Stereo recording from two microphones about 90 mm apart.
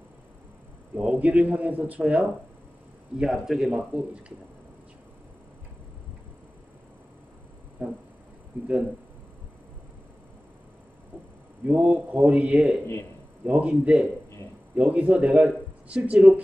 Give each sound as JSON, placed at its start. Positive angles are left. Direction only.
{"t": 0.9, "sound": "a man's voice", "side_deg": -15}
{"t": 7.8, "sound": "a man's voice", "side_deg": -15}
{"t": 11.6, "sound": "a man's voice", "side_deg": -15}